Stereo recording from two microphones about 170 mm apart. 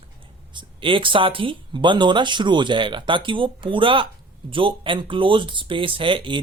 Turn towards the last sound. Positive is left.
turn(degrees=-30)  # may be behind; listen again after turning